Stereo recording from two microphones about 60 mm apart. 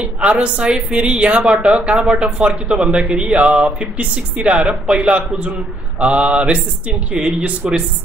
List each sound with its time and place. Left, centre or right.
0.0 s speech: right